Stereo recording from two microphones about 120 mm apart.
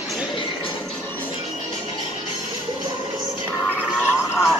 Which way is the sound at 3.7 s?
10° right (ahead or behind).